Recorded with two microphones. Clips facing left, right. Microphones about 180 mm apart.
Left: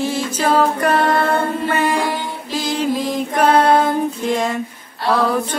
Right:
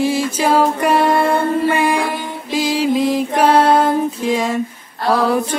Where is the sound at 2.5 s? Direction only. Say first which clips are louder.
Right 4 dB; 10° right (ahead or behind).